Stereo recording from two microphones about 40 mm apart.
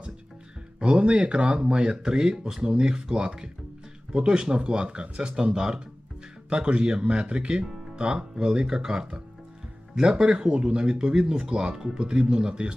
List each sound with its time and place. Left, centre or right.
0.8 s speech: right